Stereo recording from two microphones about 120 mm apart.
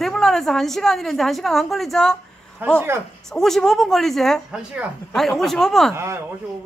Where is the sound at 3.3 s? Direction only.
5° left (ahead or behind).